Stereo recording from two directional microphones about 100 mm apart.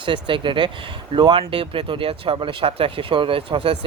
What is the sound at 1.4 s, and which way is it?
Speech, 70° right (ahead or behind).